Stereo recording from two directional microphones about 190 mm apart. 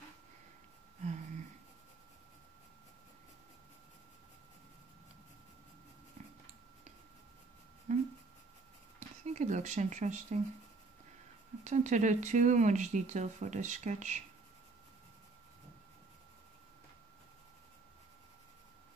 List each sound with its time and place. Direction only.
7.9 s a sound: 40° right (ahead or behind)
9.2 s speech: 40° right (ahead or behind)
11.6 s speech: 40° right (ahead or behind)